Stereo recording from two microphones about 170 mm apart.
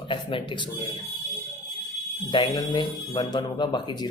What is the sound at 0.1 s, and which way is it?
Speech, 30° left (ahead or behind).